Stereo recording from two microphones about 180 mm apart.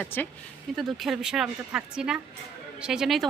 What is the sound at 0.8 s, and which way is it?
Speech, centre (ahead or behind).